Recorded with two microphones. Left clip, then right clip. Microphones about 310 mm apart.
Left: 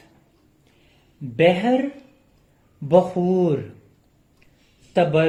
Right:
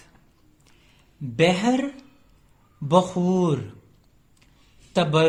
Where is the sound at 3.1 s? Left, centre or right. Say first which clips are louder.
Left 3 dB; right.